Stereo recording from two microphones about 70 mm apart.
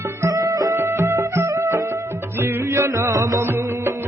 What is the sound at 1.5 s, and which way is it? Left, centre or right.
Music, right.